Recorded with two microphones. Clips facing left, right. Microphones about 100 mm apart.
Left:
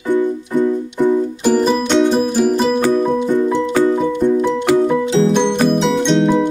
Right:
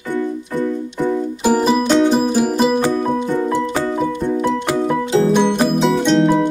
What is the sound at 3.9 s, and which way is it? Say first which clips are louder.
Music: left 4 dB; 5° right (ahead or behind).